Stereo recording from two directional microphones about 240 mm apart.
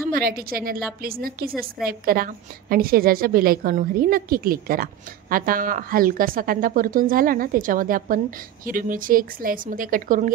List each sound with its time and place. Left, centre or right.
0.1 s a woman's voice: right